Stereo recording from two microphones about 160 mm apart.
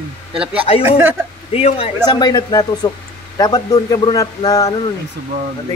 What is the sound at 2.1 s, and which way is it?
A man's voice, 25° left (ahead or behind).